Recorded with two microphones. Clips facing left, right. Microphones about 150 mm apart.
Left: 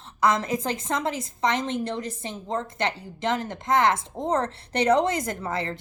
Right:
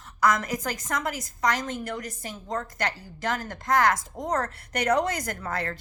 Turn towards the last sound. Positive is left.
turn(degrees=25)  # may be behind; listen again after turning